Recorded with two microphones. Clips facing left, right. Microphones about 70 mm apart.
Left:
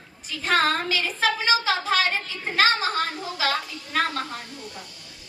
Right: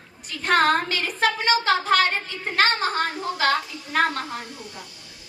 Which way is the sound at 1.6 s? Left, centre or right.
Right.